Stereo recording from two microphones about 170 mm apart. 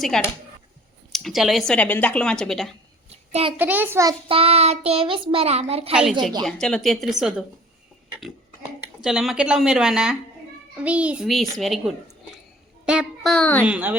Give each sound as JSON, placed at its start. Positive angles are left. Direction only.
{"t": 0.1, "sound": "speech", "side_deg": 5}
{"t": 3.1, "sound": "a sound", "side_deg": -35}
{"t": 3.6, "sound": "a child's voice", "side_deg": -10}
{"t": 4.3, "sound": "a child's voice", "side_deg": -35}
{"t": 5.9, "sound": "speech", "side_deg": -5}
{"t": 9.0, "sound": "a child's voice", "side_deg": -5}
{"t": 13.7, "sound": "a child's voice", "side_deg": -10}